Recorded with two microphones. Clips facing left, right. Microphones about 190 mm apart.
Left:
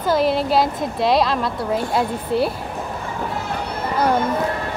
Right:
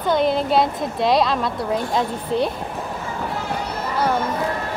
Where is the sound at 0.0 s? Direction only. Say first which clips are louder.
Left 1 dB; 5° left (ahead or behind).